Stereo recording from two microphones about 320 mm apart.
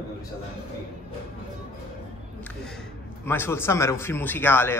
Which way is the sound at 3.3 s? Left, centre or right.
Centre.